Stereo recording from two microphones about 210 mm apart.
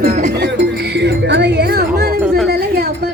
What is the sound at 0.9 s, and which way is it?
Music, 55° right (ahead or behind).